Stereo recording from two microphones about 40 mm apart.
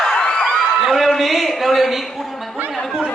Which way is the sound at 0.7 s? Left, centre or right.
Centre.